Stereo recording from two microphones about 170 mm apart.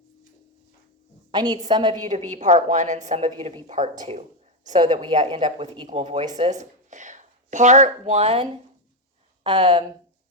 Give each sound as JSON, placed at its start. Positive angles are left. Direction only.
{"t": 1.3, "sound": "a woman's voice", "side_deg": -25}
{"t": 2.0, "sound": "a woman's voice", "side_deg": -45}
{"t": 4.7, "sound": "a woman's voice", "side_deg": -25}
{"t": 9.4, "sound": "speech", "side_deg": -25}